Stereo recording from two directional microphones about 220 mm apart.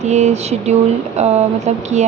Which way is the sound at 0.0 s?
30° right (ahead or behind).